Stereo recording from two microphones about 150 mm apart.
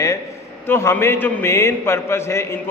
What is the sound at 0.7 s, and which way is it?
A man's voice, 15° left (ahead or behind).